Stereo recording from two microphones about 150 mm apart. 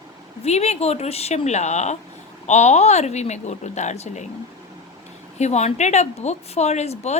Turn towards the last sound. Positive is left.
turn(degrees=45)  # may be behind; listen again after turning